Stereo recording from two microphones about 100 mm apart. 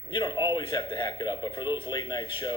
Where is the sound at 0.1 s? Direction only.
55° left (ahead or behind).